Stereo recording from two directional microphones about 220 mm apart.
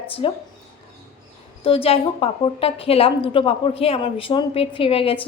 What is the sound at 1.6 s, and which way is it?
A woman's voice, 25° left (ahead or behind).